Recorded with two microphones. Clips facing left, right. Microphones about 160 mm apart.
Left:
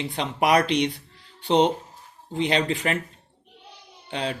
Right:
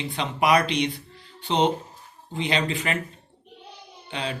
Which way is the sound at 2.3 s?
50° left (ahead or behind).